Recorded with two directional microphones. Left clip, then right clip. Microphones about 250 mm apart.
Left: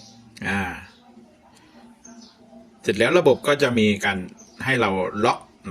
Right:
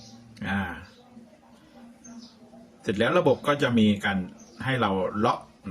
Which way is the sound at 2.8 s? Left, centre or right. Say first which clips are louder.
Left 5 dB; centre.